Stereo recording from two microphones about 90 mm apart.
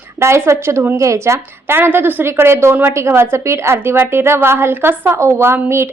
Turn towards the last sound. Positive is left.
turn(degrees=-25)  # may be behind; listen again after turning